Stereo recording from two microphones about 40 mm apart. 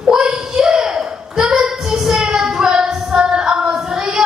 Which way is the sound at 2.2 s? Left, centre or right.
Centre.